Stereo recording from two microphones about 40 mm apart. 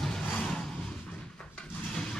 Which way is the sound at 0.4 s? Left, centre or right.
Left.